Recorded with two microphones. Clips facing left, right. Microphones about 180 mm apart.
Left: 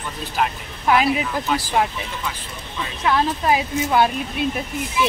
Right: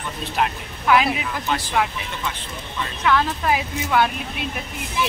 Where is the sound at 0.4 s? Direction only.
Centre (ahead or behind).